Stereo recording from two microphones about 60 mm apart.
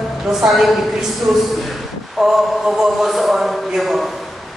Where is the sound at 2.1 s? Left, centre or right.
Centre.